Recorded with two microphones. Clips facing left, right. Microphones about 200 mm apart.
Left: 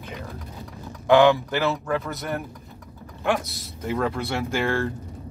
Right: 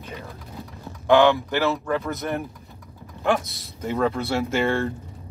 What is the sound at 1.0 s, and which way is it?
Speech, 15° left (ahead or behind).